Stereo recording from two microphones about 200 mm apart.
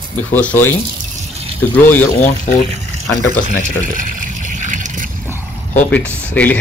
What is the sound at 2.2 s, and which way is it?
Speech, 35° left (ahead or behind).